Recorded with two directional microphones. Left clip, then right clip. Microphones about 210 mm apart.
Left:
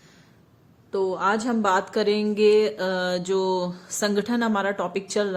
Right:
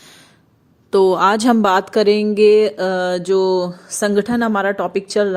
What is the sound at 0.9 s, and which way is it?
A woman's voice, 55° right (ahead or behind).